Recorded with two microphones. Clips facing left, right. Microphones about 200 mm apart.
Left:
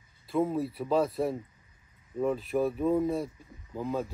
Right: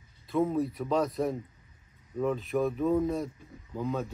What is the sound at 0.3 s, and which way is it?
Speech, 5° left (ahead or behind).